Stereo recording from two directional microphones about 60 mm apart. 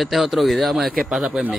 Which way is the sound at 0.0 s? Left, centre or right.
Centre.